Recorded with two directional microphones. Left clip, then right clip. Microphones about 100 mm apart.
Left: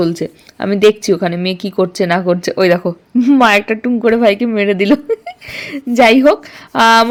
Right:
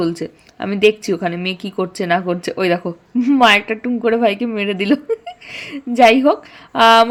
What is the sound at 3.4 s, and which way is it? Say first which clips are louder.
A woman's voice: right 2 dB; 30° left (ahead or behind).